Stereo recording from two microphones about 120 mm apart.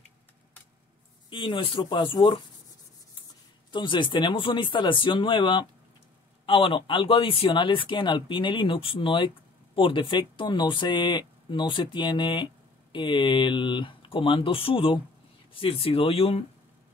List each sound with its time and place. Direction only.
1.3 s speech: 45° left (ahead or behind)
3.7 s speech: 45° left (ahead or behind)